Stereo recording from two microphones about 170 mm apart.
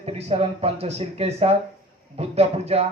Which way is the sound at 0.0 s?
35° right (ahead or behind).